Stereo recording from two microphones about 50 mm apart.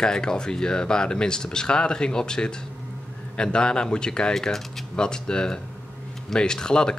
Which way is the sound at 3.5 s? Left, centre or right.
Centre.